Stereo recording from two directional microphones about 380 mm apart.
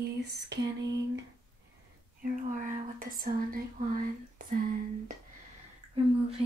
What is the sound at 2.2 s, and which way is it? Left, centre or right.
Speech, right.